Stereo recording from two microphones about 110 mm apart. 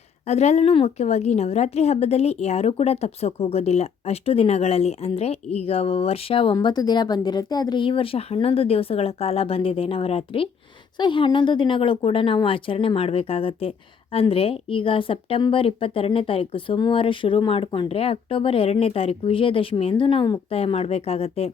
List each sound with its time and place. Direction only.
0.3 s a woman's voice: 80° left; by 10.5 s 60° left (ahead or behind)
10.9 s a woman's voice: 45° left (ahead or behind)
20.5 s a woman's voice: 65° left (ahead or behind)